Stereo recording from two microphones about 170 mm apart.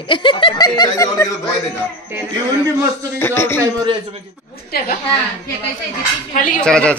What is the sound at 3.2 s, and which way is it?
Speech, 15° left (ahead or behind).